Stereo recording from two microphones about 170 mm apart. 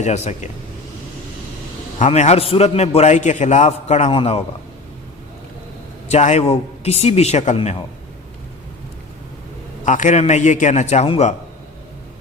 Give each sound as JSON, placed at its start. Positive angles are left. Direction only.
{"t": 0.0, "sound": "a man's voice", "side_deg": 45}
{"t": 2.0, "sound": "a man's voice", "side_deg": 40}
{"t": 6.1, "sound": "a man's voice", "side_deg": 40}
{"t": 9.8, "sound": "a man's voice", "side_deg": 45}